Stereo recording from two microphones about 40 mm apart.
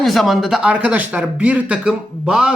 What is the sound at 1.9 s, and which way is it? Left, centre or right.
Speech, centre.